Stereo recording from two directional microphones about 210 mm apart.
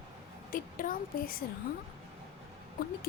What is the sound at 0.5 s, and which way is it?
Speech, 40° left (ahead or behind).